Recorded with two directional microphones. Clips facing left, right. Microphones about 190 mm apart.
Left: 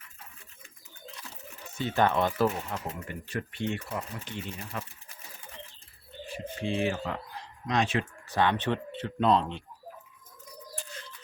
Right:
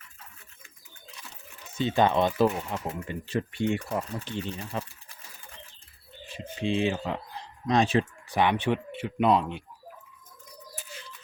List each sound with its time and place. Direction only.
1.8 s speech: 15° right (ahead or behind)
3.6 s speech: 10° right (ahead or behind)
4.4 s speech: 30° right (ahead or behind)
6.3 s speech: 20° right (ahead or behind)
7.7 s speech: 35° right (ahead or behind)
8.3 s speech: 15° right (ahead or behind)